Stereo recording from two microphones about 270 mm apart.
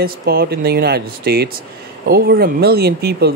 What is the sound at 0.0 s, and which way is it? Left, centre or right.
Speech, right.